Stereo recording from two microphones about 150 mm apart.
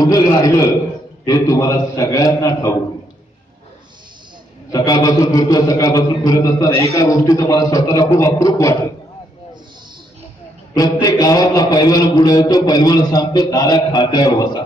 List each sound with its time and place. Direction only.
0.0 s a man's voice: 25° left (ahead or behind)
4.7 s a man's voice: 25° left (ahead or behind)
10.7 s a man's voice: 25° left (ahead or behind)